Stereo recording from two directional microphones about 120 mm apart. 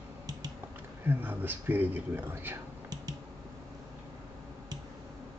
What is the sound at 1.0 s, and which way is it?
A man's voice, 15° right (ahead or behind).